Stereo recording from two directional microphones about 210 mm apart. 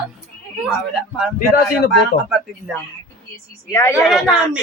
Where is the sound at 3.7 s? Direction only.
10° left (ahead or behind).